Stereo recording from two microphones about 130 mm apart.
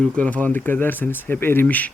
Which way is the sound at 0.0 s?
10° left (ahead or behind).